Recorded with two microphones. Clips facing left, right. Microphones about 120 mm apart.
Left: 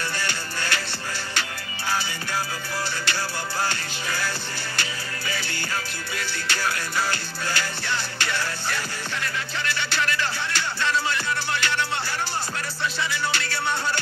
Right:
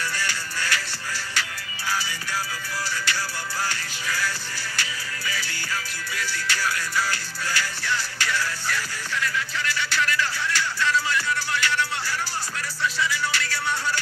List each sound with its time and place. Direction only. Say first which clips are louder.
0.2 s music: even; 25° left (ahead or behind)
3.6 s music: left 2 dB; 25° left (ahead or behind)
13.0 s music: even; 25° left (ahead or behind)